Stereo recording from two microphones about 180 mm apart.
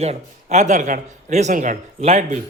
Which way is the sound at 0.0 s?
35° right (ahead or behind).